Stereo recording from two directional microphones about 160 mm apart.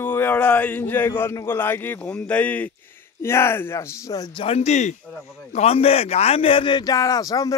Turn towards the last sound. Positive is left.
turn(degrees=20)  # may be behind; listen again after turning